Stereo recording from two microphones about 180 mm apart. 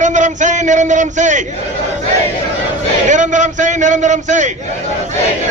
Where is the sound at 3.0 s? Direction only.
45° right (ahead or behind).